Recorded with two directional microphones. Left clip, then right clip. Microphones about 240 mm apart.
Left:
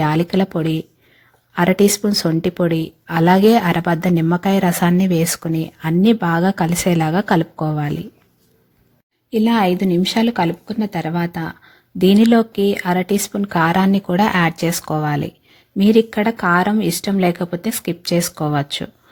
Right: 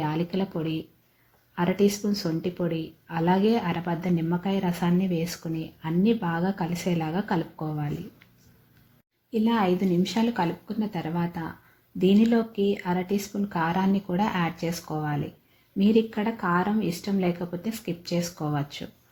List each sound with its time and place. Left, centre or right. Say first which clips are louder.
0.0 s speech: left 11 dB; left
9.3 s speech: left 8 dB; left